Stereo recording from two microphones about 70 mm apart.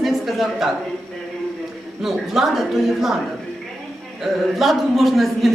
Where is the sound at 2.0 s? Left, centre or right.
Centre.